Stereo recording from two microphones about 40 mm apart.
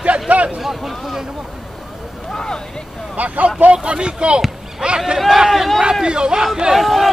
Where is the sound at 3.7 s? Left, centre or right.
Right.